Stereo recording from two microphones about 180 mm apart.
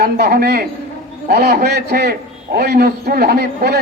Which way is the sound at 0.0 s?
60° right (ahead or behind).